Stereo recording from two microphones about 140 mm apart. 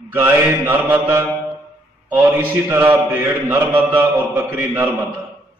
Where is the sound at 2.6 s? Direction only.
15° right (ahead or behind).